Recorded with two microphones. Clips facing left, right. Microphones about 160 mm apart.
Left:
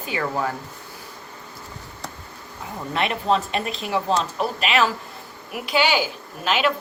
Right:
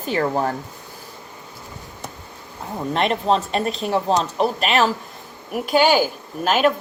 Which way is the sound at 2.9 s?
35° right (ahead or behind).